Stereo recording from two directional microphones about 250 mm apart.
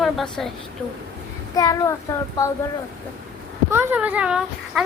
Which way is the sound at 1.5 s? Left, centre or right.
Centre.